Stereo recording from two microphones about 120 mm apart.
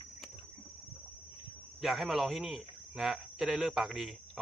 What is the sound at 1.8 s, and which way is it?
Speech, centre (ahead or behind).